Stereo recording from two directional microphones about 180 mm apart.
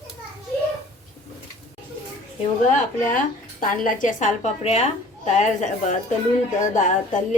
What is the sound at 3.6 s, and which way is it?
A woman's voice, 45° left (ahead or behind).